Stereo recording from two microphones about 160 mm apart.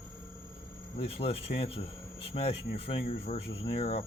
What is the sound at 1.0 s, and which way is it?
Speech, 40° left (ahead or behind).